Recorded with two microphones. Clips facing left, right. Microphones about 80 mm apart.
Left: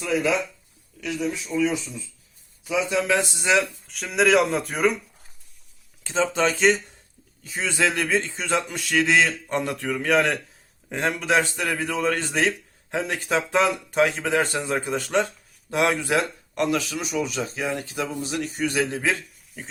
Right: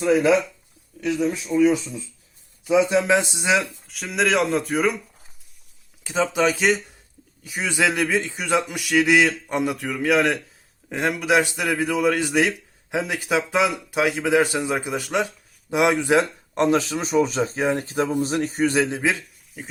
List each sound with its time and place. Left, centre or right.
1.0 s speech: right
2.7 s speech: right
3.5 s speech: centre
6.0 s a man's voice: centre; by 18.8 s right
18.8 s speech: right
19.6 s a man's voice: centre